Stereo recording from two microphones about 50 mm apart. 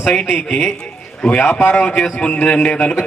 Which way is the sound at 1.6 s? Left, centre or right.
Left.